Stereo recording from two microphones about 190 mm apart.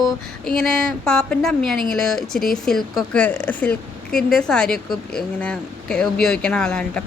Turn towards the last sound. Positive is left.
turn(degrees=5)  # may be behind; listen again after turning